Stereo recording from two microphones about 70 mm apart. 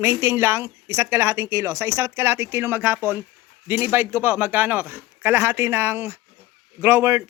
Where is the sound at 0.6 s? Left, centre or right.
Right.